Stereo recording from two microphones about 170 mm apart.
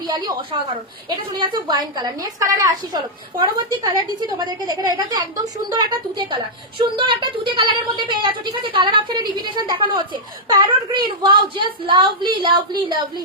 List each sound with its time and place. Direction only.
0.5 s a woman's voice: 35° right (ahead or behind)